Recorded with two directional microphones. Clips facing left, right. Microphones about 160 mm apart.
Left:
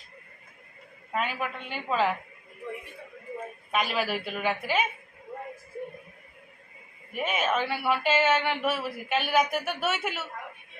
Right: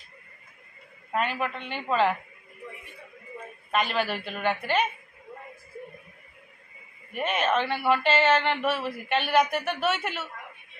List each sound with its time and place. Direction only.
1.1 s speech: 5° left (ahead or behind)
3.7 s speech: 5° left (ahead or behind)
7.2 s speech: 5° left (ahead or behind)